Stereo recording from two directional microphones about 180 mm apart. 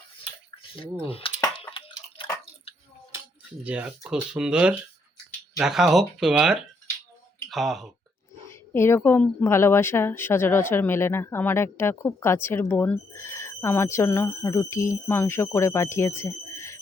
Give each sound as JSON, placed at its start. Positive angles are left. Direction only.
{"t": 0.2, "sound": "a sound", "side_deg": 30}
{"t": 1.0, "sound": "speech", "side_deg": 30}
{"t": 3.6, "sound": "speech", "side_deg": -5}
{"t": 8.4, "sound": "a woman's voice", "side_deg": 15}